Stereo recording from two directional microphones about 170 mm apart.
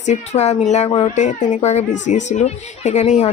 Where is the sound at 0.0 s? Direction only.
40° left (ahead or behind).